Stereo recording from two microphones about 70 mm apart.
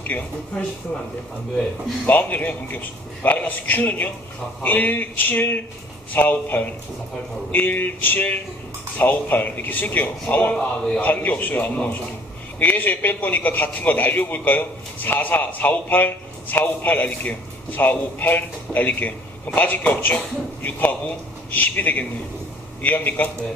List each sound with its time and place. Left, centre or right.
0.1 s a man's voice: left
2.0 s a man's voice: left
10.5 s speech: centre
11.0 s a man's voice: left